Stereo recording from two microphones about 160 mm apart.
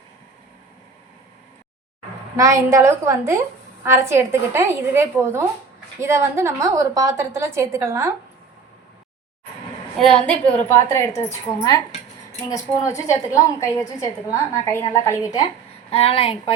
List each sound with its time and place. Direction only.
2.3 s a woman's voice: 20° right (ahead or behind)
10.0 s a woman's voice: 5° left (ahead or behind)
15.9 s a woman's voice: 40° left (ahead or behind)